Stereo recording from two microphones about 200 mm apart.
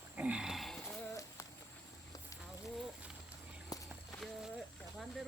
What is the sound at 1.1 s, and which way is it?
Horse, 15° left (ahead or behind).